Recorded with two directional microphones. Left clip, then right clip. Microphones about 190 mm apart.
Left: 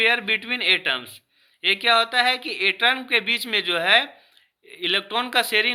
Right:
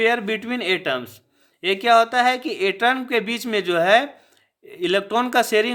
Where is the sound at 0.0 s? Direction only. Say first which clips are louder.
Even; 40° right (ahead or behind).